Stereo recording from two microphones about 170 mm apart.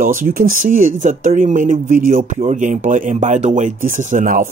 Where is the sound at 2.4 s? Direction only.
45° right (ahead or behind).